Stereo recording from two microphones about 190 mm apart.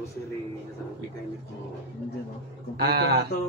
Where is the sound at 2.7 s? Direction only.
60° right (ahead or behind).